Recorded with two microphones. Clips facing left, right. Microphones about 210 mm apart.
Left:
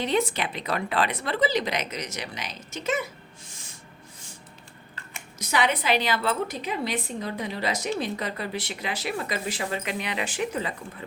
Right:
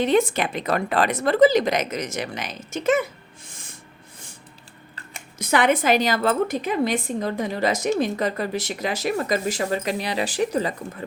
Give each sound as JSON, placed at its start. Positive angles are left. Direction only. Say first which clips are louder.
{"t": 0.0, "sound": "a woman's voice", "louder": "right 6 dB", "side_deg": -50}
{"t": 3.4, "sound": "owl", "louder": "right 3 dB", "side_deg": -55}
{"t": 5.4, "sound": "a woman's voice", "louder": "right 6 dB", "side_deg": -55}